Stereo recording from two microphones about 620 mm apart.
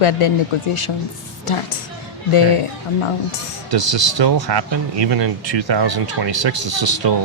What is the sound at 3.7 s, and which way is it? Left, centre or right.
Speech, right.